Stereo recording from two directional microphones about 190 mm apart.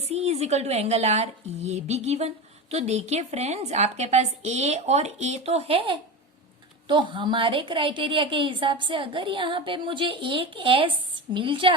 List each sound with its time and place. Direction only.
0.1 s a woman's voice: 35° right (ahead or behind)